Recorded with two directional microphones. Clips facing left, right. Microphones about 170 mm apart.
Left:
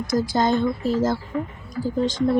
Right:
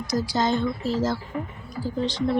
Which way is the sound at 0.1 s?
50° left (ahead or behind).